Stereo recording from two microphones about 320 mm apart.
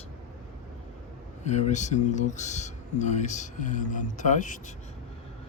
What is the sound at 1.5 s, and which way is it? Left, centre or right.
Speech, left.